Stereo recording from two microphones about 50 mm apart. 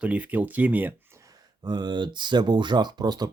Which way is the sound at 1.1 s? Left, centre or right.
Right.